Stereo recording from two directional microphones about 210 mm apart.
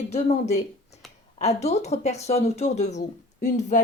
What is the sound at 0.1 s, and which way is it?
Speech, 30° left (ahead or behind).